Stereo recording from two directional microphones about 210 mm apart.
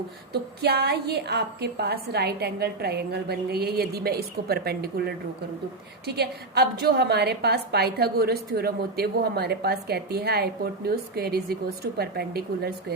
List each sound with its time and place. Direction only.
0.6 s a woman's voice: 50° right (ahead or behind)